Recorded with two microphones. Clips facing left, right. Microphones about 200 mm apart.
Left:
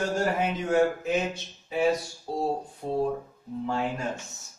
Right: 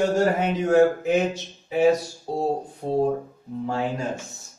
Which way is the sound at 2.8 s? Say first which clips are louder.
Right 5 dB; 30° right (ahead or behind).